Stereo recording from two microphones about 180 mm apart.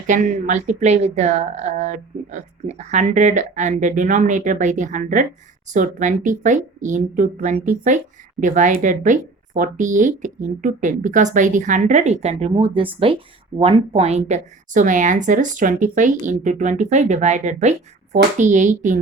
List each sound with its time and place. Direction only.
0.1 s speech: 45° right (ahead or behind)